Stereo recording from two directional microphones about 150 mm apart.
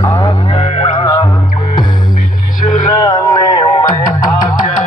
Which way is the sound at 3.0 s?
25° left (ahead or behind).